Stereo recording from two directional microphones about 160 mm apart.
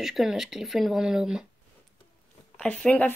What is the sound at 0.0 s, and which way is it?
Speech, 5° right (ahead or behind).